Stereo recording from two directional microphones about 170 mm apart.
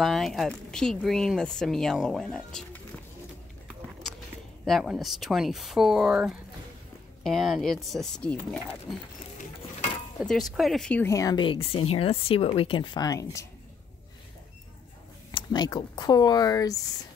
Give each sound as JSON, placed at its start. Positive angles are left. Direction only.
{"t": 0.0, "sound": "speech", "side_deg": 0}
{"t": 4.6, "sound": "speech", "side_deg": 0}
{"t": 10.2, "sound": "speech", "side_deg": 0}
{"t": 15.3, "sound": "speech", "side_deg": 25}